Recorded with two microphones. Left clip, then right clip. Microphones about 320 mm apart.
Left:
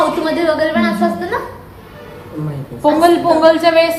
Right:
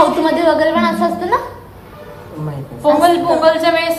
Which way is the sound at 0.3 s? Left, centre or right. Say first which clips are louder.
Right 2 dB; centre.